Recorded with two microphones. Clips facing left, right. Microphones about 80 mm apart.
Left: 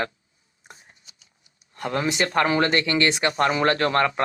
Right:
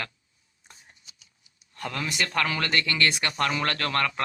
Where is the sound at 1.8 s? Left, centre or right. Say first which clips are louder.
Left 6 dB; left.